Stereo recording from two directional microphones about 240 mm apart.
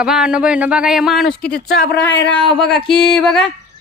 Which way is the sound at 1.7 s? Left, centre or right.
Left.